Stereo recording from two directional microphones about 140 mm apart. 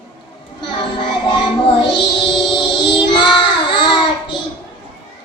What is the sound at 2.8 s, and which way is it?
Child singing, 35° left (ahead or behind).